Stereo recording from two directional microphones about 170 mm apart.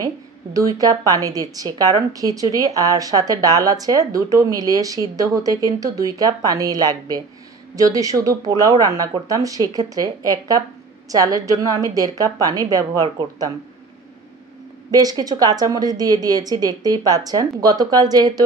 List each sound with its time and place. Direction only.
0.0 s a woman's voice: 20° right (ahead or behind)
14.9 s a woman's voice: 20° right (ahead or behind)